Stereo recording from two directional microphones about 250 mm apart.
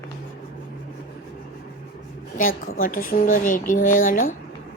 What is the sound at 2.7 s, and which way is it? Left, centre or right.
Speech, left.